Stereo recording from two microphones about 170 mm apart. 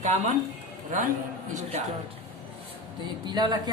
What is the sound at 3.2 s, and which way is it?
Speech, 25° right (ahead or behind).